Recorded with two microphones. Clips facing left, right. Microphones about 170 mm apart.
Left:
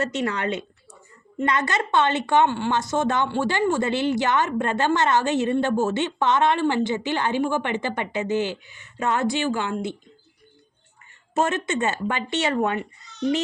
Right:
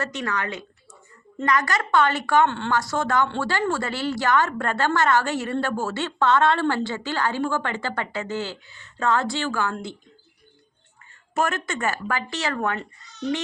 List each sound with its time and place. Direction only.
0.0 s a woman's voice: 25° left (ahead or behind)
11.3 s a woman's voice: 20° left (ahead or behind)